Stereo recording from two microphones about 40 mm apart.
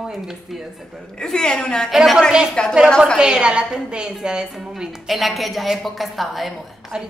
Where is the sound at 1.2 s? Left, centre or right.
Centre.